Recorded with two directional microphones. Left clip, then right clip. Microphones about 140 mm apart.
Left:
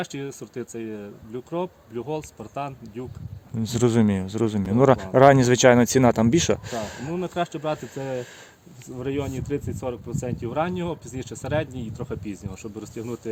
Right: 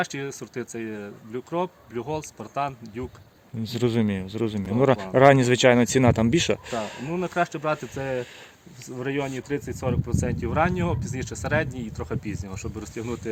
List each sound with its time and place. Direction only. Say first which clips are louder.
0.0 s speech: right 3 dB; 15° left (ahead or behind)
3.6 s speech: left 3 dB; 45° left (ahead or behind)
7.2 s speech: right 2 dB; 15° left (ahead or behind)
9.0 s speech: even; 20° left (ahead or behind)